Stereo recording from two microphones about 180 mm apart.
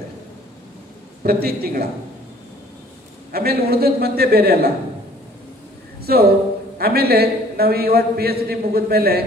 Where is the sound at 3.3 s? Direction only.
60° right (ahead or behind).